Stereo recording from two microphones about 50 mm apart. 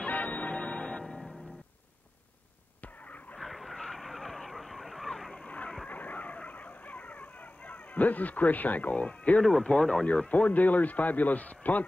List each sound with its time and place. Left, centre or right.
0.0 s change ringing: left
0.8 s music: centre
2.8 s vehicle: left
3.3 s vehicle: centre
5.3 s a sound: centre
5.9 s vehicle: left
9.4 s speech: centre
10.0 s a man's voice: left